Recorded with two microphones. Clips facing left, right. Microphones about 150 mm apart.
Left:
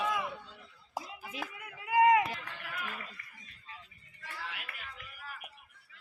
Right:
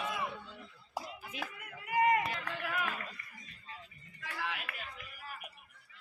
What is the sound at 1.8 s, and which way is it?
Run, 90° left.